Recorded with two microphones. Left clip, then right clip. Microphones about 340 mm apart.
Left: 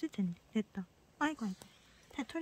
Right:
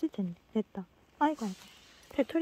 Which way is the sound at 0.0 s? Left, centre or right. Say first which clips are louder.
Right 5 dB; centre.